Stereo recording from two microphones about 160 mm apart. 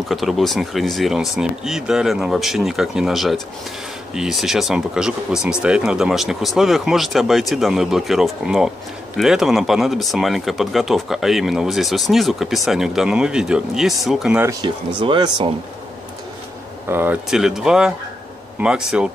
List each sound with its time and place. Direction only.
0.1 s speech: centre (ahead or behind)
14.4 s speech: 20° right (ahead or behind)
16.9 s speech: 10° right (ahead or behind)